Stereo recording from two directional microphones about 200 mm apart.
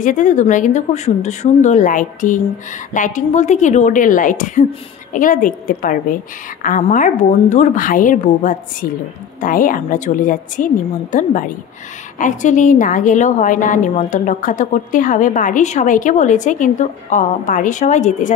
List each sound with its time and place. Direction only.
0.0 s a woman's voice: 40° left (ahead or behind)